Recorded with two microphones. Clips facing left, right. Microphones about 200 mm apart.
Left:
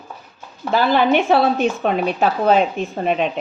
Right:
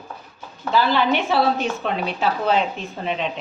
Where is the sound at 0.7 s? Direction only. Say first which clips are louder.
Left 3 dB; 50° left (ahead or behind).